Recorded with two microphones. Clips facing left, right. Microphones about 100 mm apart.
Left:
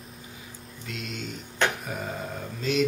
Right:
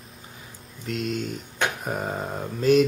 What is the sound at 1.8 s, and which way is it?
Mantra, 40° right (ahead or behind).